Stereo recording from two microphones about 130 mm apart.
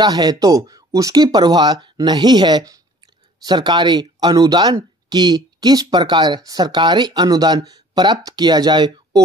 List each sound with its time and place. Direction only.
0.0 s speech: 30° right (ahead or behind)